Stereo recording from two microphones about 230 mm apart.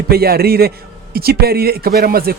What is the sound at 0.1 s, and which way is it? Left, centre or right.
A man's voice, right.